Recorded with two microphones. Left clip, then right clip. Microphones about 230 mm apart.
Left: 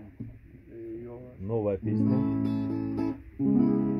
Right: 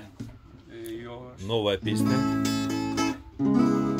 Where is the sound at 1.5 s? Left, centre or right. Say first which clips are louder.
Right 3 dB; right.